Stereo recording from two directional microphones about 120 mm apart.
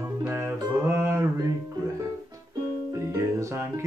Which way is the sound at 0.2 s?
15° right (ahead or behind).